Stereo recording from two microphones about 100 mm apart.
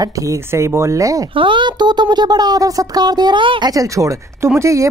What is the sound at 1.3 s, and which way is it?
Speech, 55° right (ahead or behind).